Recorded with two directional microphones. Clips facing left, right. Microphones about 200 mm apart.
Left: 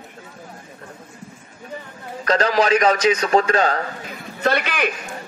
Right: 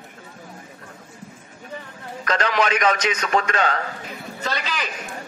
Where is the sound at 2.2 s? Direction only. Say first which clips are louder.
Left 4 dB; 35° left (ahead or behind).